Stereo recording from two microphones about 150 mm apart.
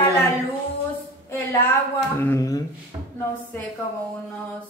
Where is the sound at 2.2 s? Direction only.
20° left (ahead or behind).